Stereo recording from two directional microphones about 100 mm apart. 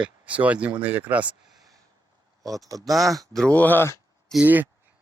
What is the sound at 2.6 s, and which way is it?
Speech, 35° right (ahead or behind).